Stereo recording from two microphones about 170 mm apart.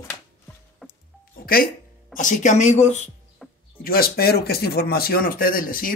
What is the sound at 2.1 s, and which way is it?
Speech, 50° left (ahead or behind).